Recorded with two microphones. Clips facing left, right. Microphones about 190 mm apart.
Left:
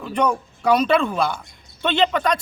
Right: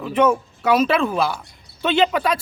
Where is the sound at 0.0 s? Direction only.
5° right (ahead or behind).